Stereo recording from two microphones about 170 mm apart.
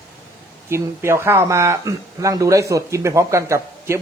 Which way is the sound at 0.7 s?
15° right (ahead or behind).